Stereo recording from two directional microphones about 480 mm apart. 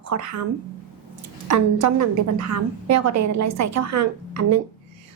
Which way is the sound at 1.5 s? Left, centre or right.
Right.